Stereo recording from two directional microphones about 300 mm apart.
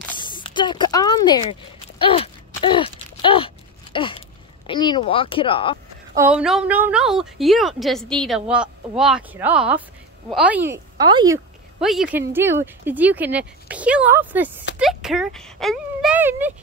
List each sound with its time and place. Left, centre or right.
0.1 s a sound: centre
4.6 s speech: centre
6.1 s speech: centre
11.8 s speech: centre